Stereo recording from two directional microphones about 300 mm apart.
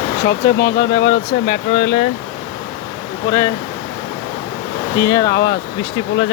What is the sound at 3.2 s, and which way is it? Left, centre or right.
Speech, centre.